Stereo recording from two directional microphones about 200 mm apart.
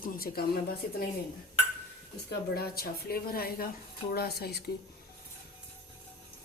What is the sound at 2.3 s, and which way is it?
A woman's voice, 50° left (ahead or behind).